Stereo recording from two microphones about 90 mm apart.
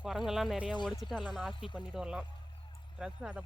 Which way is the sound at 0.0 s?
5° right (ahead or behind).